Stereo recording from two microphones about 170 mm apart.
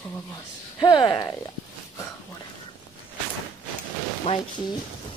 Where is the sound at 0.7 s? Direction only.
25° left (ahead or behind).